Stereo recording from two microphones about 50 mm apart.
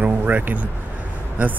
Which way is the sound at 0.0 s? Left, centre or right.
Right.